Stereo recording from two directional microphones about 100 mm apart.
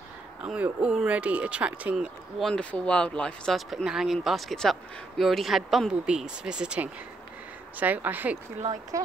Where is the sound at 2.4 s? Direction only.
5° left (ahead or behind); by 8.4 s 20° right (ahead or behind).